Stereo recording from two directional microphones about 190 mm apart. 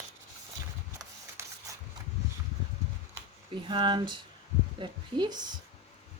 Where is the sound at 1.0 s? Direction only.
15° right (ahead or behind).